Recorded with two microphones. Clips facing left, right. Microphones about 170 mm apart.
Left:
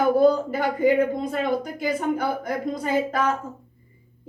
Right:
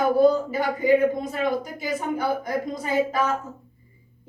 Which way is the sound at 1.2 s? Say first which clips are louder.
Left 1 dB; 55° left (ahead or behind).